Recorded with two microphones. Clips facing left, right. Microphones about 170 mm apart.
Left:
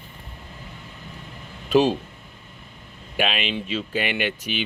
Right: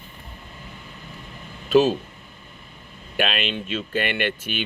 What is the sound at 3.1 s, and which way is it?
Speech, 5° left (ahead or behind).